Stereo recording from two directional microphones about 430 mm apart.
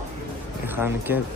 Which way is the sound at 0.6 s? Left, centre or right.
Centre.